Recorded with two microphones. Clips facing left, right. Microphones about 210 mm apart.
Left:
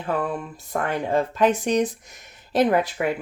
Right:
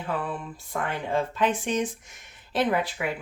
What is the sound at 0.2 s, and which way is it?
Speech, 45° left (ahead or behind).